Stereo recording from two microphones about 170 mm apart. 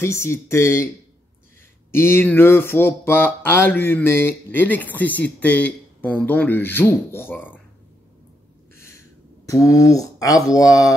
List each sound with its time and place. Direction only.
0.0 s speech: 15° left (ahead or behind)
1.9 s speech: 15° left (ahead or behind)
8.7 s a sound: 15° left (ahead or behind)
9.5 s speech: 20° left (ahead or behind)